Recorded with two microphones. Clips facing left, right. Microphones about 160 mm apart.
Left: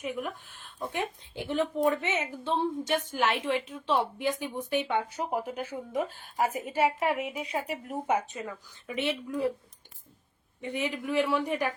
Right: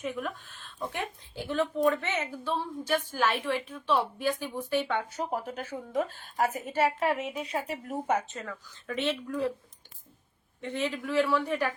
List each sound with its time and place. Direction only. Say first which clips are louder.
0.0 s a woman's voice: even; 15° left (ahead or behind)
10.6 s a woman's voice: even; 15° left (ahead or behind)